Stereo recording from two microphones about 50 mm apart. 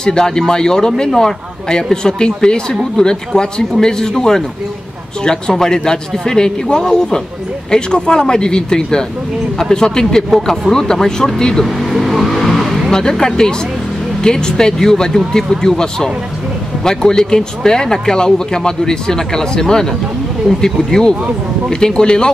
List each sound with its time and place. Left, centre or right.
0.0 s speech: centre
5.2 s speech: centre
11.6 s vehicle: centre
13.1 s speech: centre